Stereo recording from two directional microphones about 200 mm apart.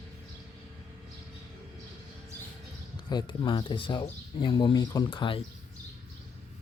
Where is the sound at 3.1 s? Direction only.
20° left (ahead or behind).